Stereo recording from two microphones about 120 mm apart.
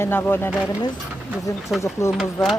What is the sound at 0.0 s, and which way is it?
Speech, 20° left (ahead or behind).